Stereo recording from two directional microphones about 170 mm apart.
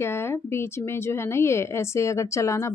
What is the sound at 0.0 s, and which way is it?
A woman's voice, 15° left (ahead or behind).